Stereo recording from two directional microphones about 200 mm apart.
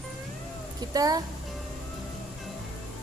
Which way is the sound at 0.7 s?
20° right (ahead or behind).